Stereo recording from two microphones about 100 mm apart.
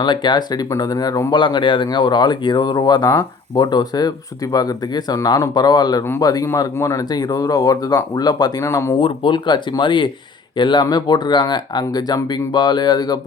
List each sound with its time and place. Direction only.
0.0 s speech: 50° left (ahead or behind)
1.3 s speech: 50° left (ahead or behind)
8.6 s speech: 30° left (ahead or behind)
9.0 s speech: 55° left (ahead or behind)